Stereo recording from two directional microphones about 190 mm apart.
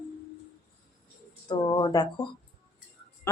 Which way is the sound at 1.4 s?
25° left (ahead or behind).